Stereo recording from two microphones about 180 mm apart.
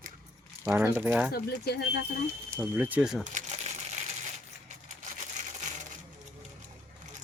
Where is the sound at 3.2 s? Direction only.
40° right (ahead or behind).